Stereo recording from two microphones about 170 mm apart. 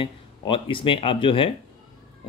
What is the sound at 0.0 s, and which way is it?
Speech, 30° left (ahead or behind).